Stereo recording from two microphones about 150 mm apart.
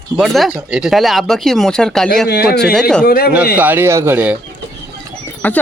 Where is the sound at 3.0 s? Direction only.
85° left.